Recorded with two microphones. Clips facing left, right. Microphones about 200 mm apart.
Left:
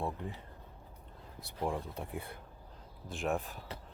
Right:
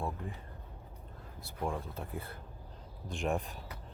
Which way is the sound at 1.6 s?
15° left (ahead or behind).